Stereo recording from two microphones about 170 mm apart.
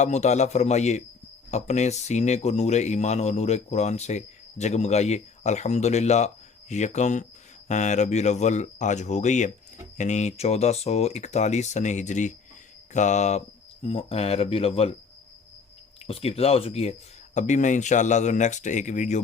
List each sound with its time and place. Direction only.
0.0 s speech: 40° left (ahead or behind)
16.0 s speech: 35° left (ahead or behind)